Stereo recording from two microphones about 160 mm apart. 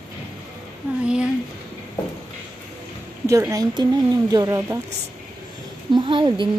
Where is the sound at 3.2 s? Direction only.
20° right (ahead or behind).